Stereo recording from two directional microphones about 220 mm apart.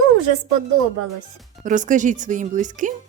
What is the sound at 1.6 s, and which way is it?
Speech, 35° right (ahead or behind).